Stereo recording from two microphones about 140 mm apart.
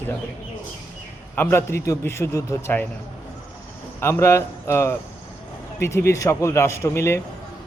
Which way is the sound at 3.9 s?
15° left (ahead or behind).